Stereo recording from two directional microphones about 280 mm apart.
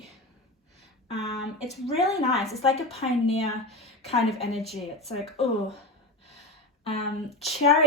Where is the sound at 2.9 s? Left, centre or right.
Left.